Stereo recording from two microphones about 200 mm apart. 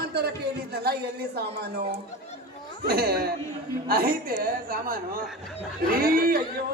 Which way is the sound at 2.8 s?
50° right (ahead or behind).